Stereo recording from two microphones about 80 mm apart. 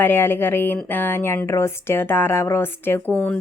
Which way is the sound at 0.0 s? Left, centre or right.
Left.